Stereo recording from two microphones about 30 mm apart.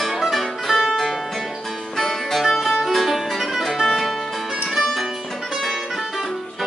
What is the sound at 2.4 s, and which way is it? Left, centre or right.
Music, centre.